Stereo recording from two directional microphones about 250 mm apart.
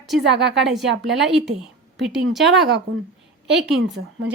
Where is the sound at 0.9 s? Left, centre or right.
Right.